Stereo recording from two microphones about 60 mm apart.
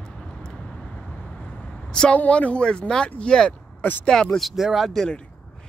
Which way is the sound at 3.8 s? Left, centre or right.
Left.